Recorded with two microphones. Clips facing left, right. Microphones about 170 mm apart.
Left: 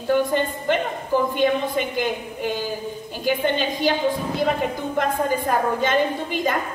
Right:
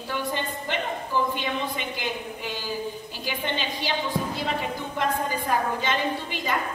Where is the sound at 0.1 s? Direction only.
50° left (ahead or behind).